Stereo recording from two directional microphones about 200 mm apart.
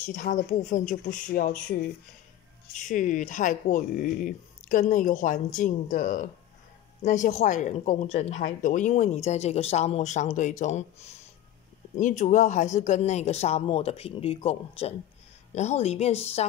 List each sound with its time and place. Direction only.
0.1 s speech: 40° left (ahead or behind)